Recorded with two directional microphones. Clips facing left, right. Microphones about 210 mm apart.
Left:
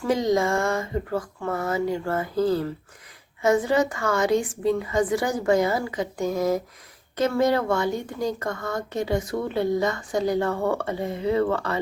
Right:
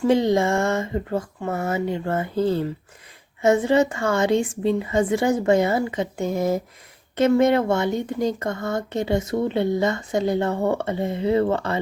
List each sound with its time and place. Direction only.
0.0 s speech: 30° right (ahead or behind)